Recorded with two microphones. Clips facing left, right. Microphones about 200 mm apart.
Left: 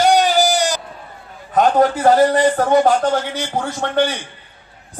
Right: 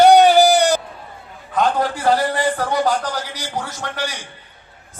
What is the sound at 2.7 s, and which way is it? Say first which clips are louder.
Speech: left 6 dB; 25° left (ahead or behind).